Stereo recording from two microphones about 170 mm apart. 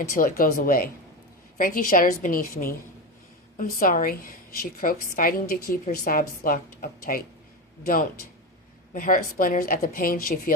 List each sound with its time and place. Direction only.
0.1 s a woman's voice: 55° left (ahead or behind)
8.9 s a woman's voice: 50° left (ahead or behind)